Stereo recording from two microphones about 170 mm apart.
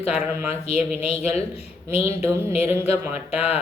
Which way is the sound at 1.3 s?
35° left (ahead or behind).